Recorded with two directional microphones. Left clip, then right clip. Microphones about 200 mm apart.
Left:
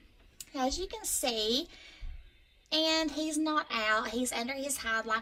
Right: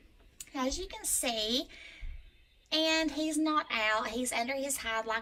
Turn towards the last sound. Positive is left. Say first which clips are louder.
# left 2 dB
turn(degrees=0)  # may be behind; listen again after turning